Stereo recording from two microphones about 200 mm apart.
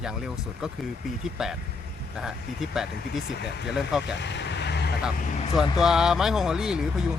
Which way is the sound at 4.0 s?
60° left (ahead or behind).